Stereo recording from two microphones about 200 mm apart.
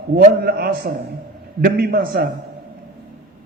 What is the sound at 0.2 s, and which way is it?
A man's voice, 50° right (ahead or behind).